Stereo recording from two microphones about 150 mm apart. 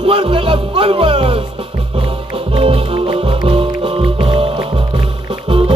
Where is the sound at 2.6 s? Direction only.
40° right (ahead or behind).